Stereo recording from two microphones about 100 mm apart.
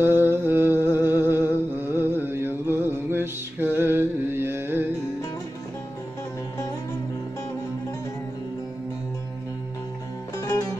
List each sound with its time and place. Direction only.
0.0 s a sound: 25° right (ahead or behind)
0.9 s music: 20° right (ahead or behind)
10.4 s music: 40° left (ahead or behind)